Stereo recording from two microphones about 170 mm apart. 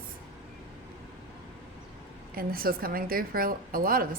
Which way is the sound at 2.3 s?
60° right (ahead or behind).